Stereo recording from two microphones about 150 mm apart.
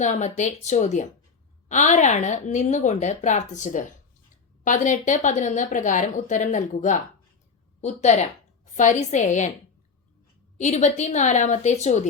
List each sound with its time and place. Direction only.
0.0 s a woman's voice: 55° left (ahead or behind)
10.6 s a woman's voice: 50° left (ahead or behind)